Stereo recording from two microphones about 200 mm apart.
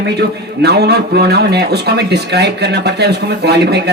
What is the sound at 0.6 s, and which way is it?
Speech, 55° right (ahead or behind).